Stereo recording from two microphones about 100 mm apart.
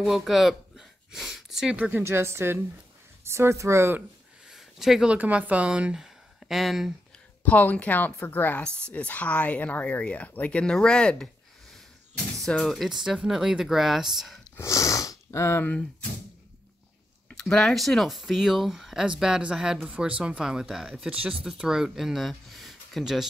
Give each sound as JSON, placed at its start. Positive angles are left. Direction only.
{"t": 0.0, "sound": "speech", "side_deg": 0}
{"t": 1.9, "sound": "speech", "side_deg": -20}
{"t": 4.5, "sound": "speech", "side_deg": -5}
{"t": 7.4, "sound": "speech", "side_deg": 15}
{"t": 12.4, "sound": "speech", "side_deg": 5}
{"t": 14.6, "sound": "speech", "side_deg": 30}
{"t": 17.3, "sound": "speech", "side_deg": 5}